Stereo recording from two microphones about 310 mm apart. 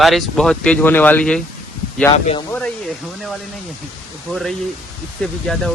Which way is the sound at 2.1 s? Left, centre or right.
Left.